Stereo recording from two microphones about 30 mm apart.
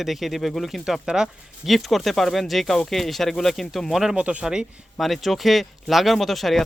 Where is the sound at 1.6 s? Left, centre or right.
Centre.